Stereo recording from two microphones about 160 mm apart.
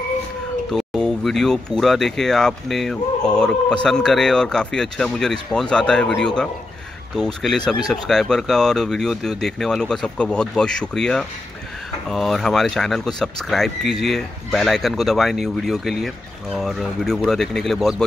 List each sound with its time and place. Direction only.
0.7 s speech: 5° left (ahead or behind)